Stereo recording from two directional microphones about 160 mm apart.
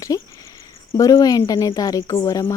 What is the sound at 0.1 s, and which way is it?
Speech, 25° left (ahead or behind).